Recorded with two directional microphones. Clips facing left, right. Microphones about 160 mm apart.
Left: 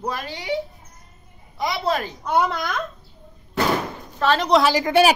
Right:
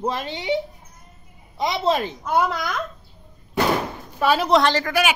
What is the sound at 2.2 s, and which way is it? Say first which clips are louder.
Speech: left 3 dB; centre (ahead or behind).